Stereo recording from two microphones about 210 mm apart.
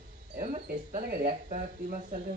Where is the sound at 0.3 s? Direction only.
35° right (ahead or behind).